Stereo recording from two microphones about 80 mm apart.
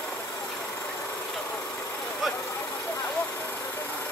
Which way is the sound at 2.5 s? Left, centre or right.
Left.